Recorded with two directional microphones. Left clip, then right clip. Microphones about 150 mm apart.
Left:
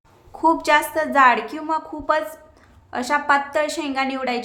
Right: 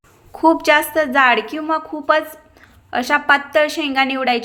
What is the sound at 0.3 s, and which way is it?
A woman's voice, 25° right (ahead or behind).